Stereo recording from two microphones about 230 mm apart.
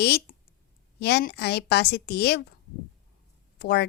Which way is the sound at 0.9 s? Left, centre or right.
Left.